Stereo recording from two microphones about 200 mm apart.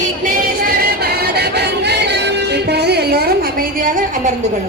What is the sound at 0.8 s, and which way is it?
Music, 50° right (ahead or behind).